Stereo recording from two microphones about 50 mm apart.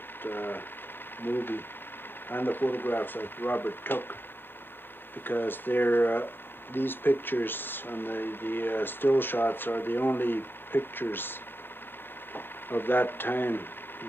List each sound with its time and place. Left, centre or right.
0.2 s speech: left
5.2 s speech: left
12.4 s speech: left